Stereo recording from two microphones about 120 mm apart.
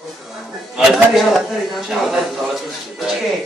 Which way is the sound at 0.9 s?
Centre (ahead or behind).